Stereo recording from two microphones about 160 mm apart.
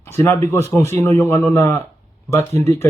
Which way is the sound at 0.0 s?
15° left (ahead or behind).